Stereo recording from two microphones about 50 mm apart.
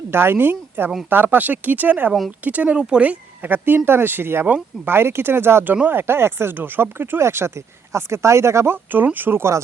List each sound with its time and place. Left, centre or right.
0.1 s a woman's voice: right
6.6 s speech: right
8.7 s speech: right